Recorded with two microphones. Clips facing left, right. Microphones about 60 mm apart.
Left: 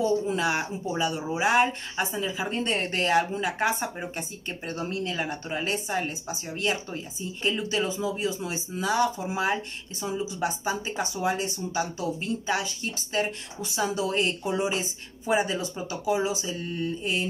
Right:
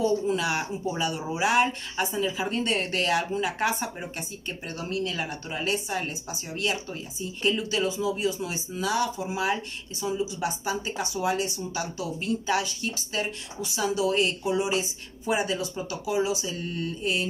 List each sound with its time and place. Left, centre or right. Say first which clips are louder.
0.0 s speech: even; left
8.8 s speech: left 2 dB; left
15.3 s speech: left 2 dB; left
16.7 s speech: left 1 dB; centre